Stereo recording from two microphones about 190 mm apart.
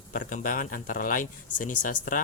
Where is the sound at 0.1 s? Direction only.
45° left (ahead or behind).